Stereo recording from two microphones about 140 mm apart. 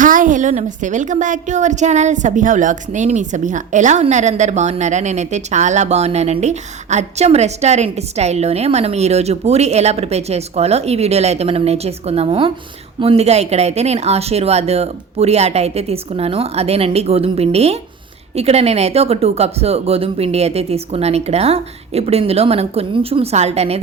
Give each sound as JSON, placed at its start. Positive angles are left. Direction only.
{"t": 0.0, "sound": "a woman's voice", "side_deg": -70}